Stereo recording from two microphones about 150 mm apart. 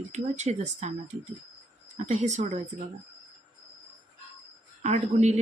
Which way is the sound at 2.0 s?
50° right (ahead or behind).